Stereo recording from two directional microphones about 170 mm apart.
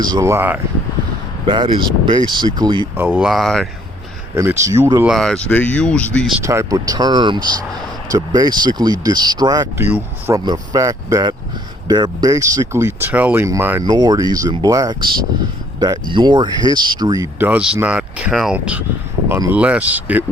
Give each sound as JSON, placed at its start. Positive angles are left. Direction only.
{"t": 0.0, "sound": "speech", "side_deg": -20}
{"t": 1.5, "sound": "speech", "side_deg": -30}
{"t": 3.0, "sound": "speech", "side_deg": -10}
{"t": 4.4, "sound": "speech", "side_deg": -15}
{"t": 5.0, "sound": "speech", "side_deg": 0}
{"t": 6.4, "sound": "speech", "side_deg": -15}
{"t": 10.4, "sound": "speech", "side_deg": -25}